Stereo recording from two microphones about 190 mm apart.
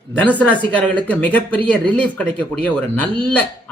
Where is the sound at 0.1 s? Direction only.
5° left (ahead or behind).